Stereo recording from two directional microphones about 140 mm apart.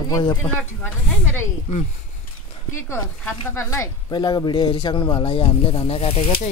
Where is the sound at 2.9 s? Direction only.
20° left (ahead or behind); by 6.5 s 45° left (ahead or behind).